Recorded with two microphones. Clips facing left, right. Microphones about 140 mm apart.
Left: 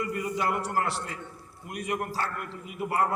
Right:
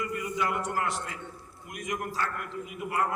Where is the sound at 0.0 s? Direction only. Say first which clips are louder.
Left 2 dB; 35° left (ahead or behind).